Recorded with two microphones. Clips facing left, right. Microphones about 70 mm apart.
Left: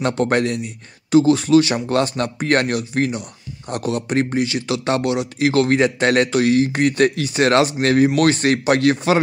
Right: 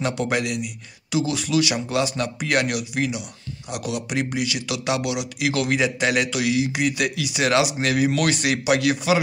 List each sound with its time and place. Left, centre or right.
0.0 s speech: left